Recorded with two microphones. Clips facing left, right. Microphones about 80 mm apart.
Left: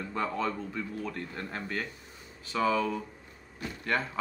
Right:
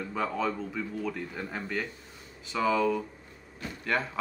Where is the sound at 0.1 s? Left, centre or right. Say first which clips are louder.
Right 1 dB; centre.